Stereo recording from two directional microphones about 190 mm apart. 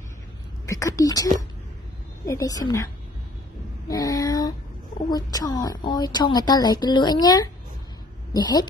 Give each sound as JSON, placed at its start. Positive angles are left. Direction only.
{"t": 0.7, "sound": "a woman's voice", "side_deg": 15}
{"t": 3.9, "sound": "a woman's voice", "side_deg": 20}